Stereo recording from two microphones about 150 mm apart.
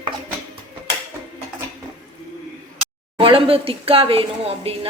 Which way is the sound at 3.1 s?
40° right (ahead or behind).